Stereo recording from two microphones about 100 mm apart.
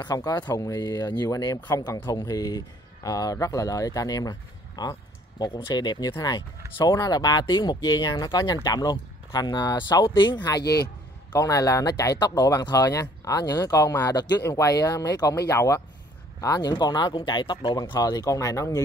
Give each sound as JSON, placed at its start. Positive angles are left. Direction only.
{"t": 0.0, "sound": "speech", "side_deg": 40}
{"t": 11.3, "sound": "speech", "side_deg": 35}
{"t": 15.5, "sound": "speech", "side_deg": 30}